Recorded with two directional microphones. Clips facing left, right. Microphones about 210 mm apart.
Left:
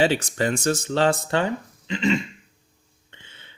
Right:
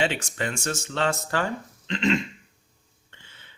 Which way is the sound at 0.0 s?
35° left (ahead or behind).